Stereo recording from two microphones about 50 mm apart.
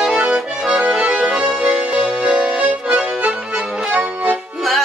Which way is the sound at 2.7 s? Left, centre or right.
Centre.